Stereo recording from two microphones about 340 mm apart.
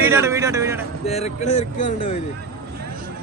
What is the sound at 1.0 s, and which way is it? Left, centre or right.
Speech, centre.